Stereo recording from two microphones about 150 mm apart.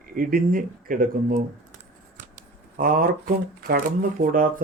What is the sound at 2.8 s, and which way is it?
Speech, 65° right (ahead or behind).